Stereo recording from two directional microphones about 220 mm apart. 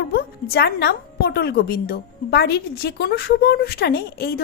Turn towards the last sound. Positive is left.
turn(degrees=45)  # may be behind; listen again after turning